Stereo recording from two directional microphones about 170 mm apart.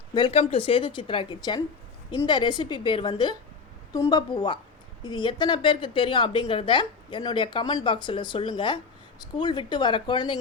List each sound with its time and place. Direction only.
0.1 s a woman's voice: 30° left (ahead or behind)